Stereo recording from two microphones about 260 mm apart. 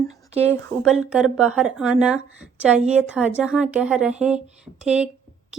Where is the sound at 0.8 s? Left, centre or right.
Centre.